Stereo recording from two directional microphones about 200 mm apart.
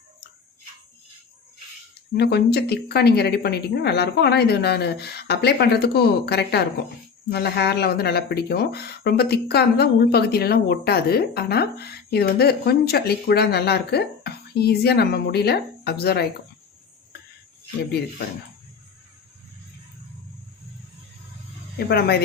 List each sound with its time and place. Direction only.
2.1 s a woman's voice: 55° left (ahead or behind)
21.8 s a woman's voice: 55° left (ahead or behind)